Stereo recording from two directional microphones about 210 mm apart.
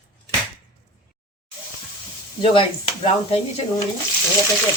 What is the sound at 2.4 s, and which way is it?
Speech, 25° left (ahead or behind).